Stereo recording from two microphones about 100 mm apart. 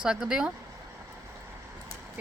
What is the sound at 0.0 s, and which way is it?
Speech, 5° right (ahead or behind).